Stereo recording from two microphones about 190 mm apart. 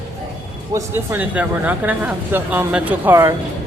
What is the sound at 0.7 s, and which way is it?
Speech, 10° right (ahead or behind).